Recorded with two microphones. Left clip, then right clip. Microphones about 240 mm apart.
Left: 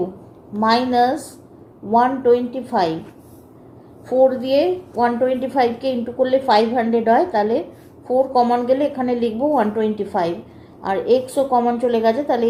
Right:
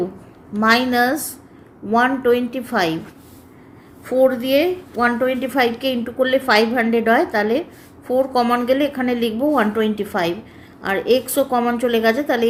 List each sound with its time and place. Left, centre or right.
0.6 s a woman's voice: right
4.0 s a woman's voice: right